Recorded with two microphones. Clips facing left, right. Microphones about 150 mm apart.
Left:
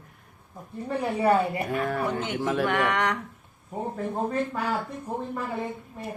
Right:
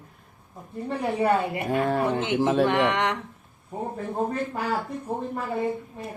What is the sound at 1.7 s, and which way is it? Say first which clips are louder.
Speech: right 4 dB; 25° right (ahead or behind).